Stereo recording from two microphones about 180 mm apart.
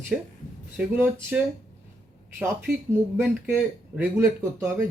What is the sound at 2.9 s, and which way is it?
Speech, 10° right (ahead or behind).